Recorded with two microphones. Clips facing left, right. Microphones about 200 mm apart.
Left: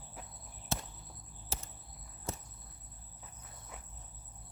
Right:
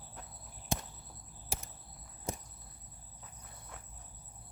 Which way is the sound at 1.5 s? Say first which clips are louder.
Right 1 dB; 15° right (ahead or behind).